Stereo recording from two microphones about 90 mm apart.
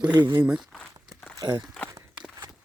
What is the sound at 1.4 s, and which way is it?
Speech, 40° right (ahead or behind).